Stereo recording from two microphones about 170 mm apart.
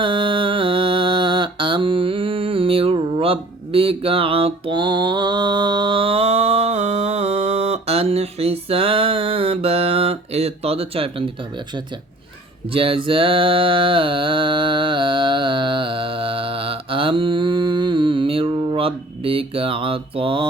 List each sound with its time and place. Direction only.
0.0 s mantra: 30° right (ahead or behind)
12.7 s mantra: 30° right (ahead or behind)